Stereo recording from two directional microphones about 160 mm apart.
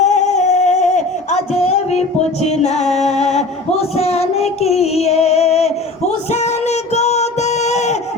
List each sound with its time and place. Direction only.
0.0 s singing: 45° left (ahead or behind)
2.4 s music: 45° left (ahead or behind)